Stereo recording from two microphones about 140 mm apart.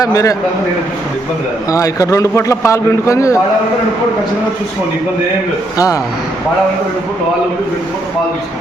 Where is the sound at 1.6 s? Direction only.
25° left (ahead or behind).